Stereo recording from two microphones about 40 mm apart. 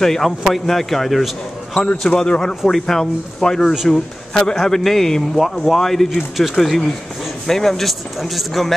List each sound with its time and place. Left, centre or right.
0.0 s speech: centre
2.0 s speech: left
2.7 s speech: centre
6.3 s speech: centre
6.6 s a man's voice: centre